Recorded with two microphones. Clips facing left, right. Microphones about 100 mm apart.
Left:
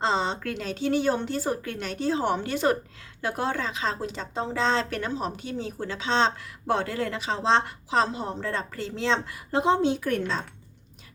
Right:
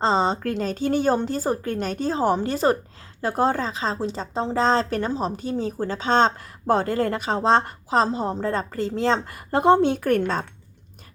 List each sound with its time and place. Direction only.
0.0 s a woman's voice: 35° right (ahead or behind); by 10.4 s 50° right (ahead or behind)